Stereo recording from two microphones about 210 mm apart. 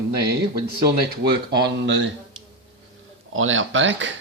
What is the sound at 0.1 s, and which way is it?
Speech, 50° right (ahead or behind).